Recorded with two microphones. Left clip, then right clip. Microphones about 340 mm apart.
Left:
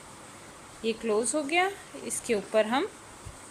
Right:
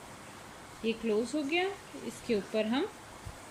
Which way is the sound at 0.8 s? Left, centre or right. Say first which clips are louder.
Left 4 dB; centre.